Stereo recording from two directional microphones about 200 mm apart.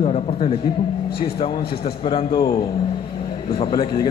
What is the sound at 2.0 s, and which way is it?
Speech, 30° left (ahead or behind).